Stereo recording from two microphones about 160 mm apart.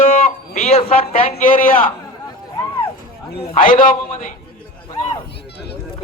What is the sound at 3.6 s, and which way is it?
Speech, 60° left (ahead or behind).